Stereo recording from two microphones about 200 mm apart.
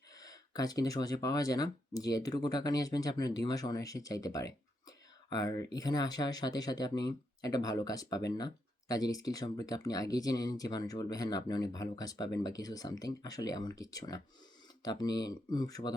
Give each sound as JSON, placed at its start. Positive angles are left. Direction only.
{"t": 0.2, "sound": "speech", "side_deg": 20}